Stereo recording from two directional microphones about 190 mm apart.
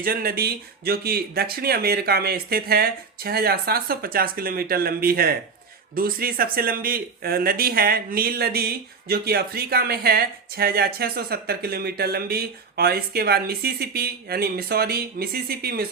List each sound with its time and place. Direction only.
0.0 s speech: 50° right (ahead or behind)